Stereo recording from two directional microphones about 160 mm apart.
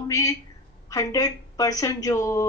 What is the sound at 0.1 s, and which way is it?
A woman's voice, 20° left (ahead or behind).